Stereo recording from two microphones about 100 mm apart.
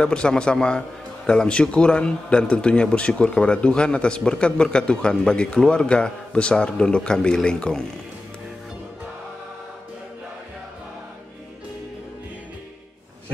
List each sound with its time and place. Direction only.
0.0 s a man's voice: 10° left (ahead or behind)